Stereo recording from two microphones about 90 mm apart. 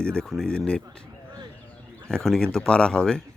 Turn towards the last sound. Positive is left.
turn(degrees=10)  # may be behind; listen again after turning